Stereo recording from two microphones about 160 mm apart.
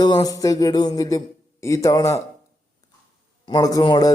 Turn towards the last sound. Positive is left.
turn(degrees=25)  # may be behind; listen again after turning